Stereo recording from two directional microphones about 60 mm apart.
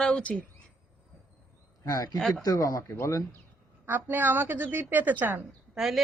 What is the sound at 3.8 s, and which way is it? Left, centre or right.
A woman's voice, right.